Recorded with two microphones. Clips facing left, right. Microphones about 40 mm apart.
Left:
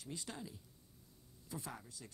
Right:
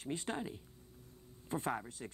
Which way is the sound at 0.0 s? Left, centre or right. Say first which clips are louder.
Right 8 dB; right.